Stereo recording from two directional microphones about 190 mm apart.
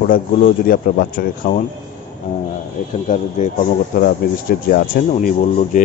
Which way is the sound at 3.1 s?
45° left (ahead or behind).